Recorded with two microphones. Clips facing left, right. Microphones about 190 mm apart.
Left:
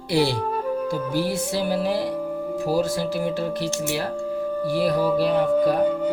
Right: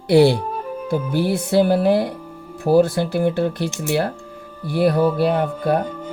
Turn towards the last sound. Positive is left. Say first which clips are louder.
# left 1 dB
turn(degrees=-60)  # may be behind; listen again after turning